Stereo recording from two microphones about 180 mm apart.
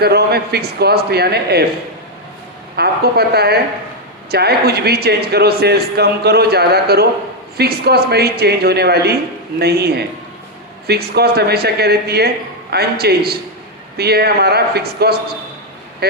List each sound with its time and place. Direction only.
0.0 s a man's voice: 60° right (ahead or behind)
2.7 s a man's voice: 60° right (ahead or behind)